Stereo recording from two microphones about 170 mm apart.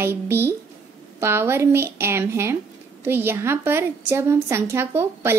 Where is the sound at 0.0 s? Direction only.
15° right (ahead or behind).